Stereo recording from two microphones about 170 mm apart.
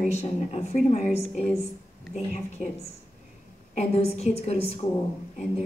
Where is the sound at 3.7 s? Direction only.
40° left (ahead or behind).